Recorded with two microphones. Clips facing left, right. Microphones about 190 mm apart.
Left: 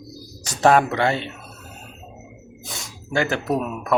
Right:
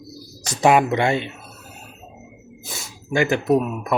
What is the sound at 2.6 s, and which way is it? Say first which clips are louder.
Speech: even; 5° right (ahead or behind).